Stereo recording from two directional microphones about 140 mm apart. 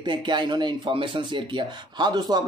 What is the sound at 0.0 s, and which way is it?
Speech, 35° right (ahead or behind).